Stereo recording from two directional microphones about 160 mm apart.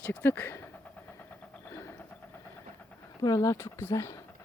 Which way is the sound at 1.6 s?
15° left (ahead or behind).